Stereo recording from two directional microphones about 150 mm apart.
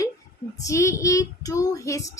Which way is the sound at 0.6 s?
20° left (ahead or behind).